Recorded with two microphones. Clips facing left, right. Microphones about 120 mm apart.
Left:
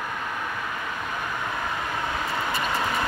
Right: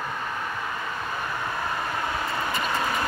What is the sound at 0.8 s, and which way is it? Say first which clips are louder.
Vehicle: even; 15° left (ahead or behind).